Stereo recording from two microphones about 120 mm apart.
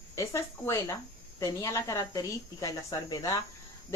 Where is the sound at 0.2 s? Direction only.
25° left (ahead or behind).